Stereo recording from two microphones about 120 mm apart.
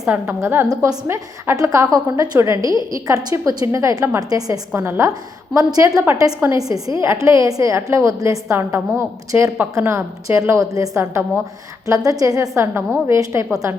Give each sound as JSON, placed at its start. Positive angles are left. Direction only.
{"t": 0.1, "sound": "a woman's voice", "side_deg": -10}
{"t": 0.7, "sound": "a woman's voice", "side_deg": -30}
{"t": 1.0, "sound": "a woman's voice", "side_deg": -20}